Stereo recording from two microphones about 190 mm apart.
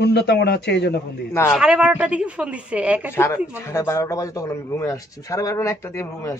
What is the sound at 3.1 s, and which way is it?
A man's voice, 15° left (ahead or behind).